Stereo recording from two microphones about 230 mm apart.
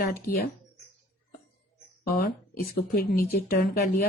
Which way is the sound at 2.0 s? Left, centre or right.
Left.